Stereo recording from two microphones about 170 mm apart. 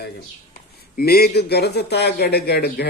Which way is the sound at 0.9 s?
65° left (ahead or behind).